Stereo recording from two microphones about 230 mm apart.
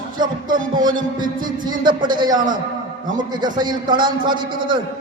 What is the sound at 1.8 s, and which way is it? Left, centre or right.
A man's voice, centre.